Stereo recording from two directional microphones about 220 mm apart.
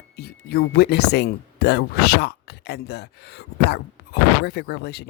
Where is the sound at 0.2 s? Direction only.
45° left (ahead or behind).